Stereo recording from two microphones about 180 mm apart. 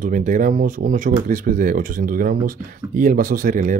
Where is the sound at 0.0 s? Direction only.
45° right (ahead or behind).